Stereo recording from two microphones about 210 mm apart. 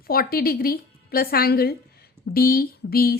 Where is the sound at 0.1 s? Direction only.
45° left (ahead or behind).